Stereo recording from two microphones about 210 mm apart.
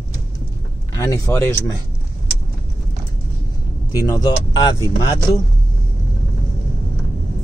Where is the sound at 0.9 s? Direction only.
15° left (ahead or behind).